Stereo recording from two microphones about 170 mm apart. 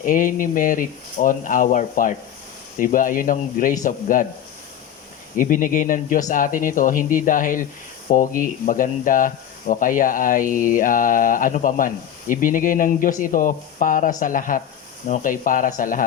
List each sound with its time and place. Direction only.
0.0 s speech: 50° left (ahead or behind)
5.4 s speech: 50° left (ahead or behind)